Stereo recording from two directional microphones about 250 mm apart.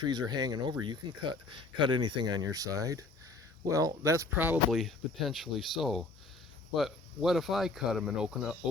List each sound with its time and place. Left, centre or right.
0.0 s speech: centre